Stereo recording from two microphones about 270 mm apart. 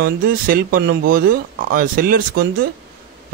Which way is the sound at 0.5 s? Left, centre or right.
Right.